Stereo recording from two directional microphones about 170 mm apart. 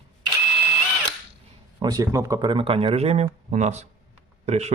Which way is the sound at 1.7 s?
25° right (ahead or behind).